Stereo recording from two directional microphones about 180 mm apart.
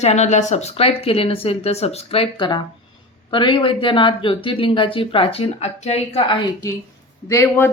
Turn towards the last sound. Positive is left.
turn(degrees=15)  # may be behind; listen again after turning